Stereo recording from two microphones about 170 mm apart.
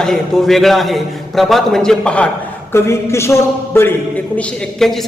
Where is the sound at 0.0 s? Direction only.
5° left (ahead or behind).